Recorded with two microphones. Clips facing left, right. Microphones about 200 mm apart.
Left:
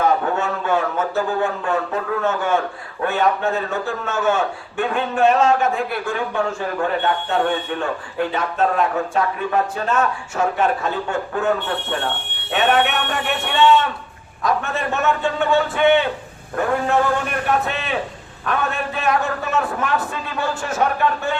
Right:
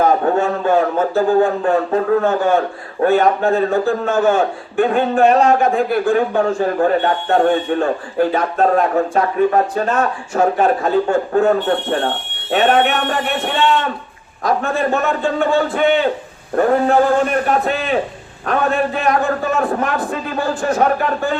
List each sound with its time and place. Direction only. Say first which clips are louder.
0.0 s a man's voice: right 5 dB; 35° right (ahead or behind)